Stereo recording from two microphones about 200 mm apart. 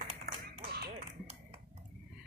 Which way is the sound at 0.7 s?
50° right (ahead or behind).